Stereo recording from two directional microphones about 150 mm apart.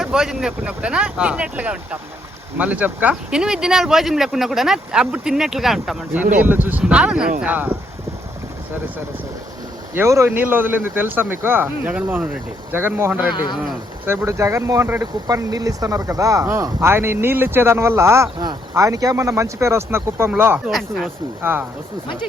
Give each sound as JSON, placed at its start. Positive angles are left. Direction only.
{"t": 0.0, "sound": "speech", "side_deg": -5}
{"t": 6.4, "sound": "speech", "side_deg": -10}
{"t": 9.9, "sound": "speech", "side_deg": -20}
{"t": 20.7, "sound": "speech", "side_deg": 0}